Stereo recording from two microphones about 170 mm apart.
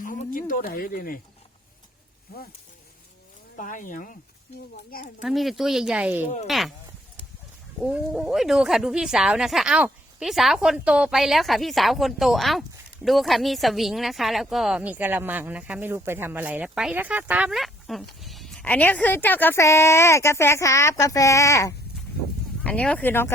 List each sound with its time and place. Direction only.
0.0 s speech: 55° left (ahead or behind)
2.3 s a child's voice: 65° left (ahead or behind)
3.5 s a child's voice: 50° left (ahead or behind)
5.2 s speech: centre (ahead or behind)
6.2 s speech: 40° left (ahead or behind)
6.5 s speech: centre (ahead or behind)
7.8 s speech: 5° right (ahead or behind); by 21.8 s 20° left (ahead or behind)
22.6 s speech: 5° left (ahead or behind)